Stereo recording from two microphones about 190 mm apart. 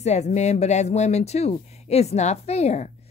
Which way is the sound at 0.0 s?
35° left (ahead or behind).